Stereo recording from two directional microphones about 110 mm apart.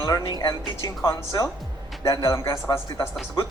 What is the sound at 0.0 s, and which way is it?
Speech, 35° left (ahead or behind).